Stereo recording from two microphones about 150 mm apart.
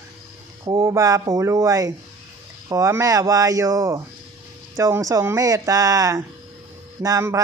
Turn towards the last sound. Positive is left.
turn(degrees=-20)  # may be behind; listen again after turning